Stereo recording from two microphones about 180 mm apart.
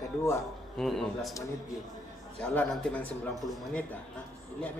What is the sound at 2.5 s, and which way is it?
A man's voice, 5° left (ahead or behind).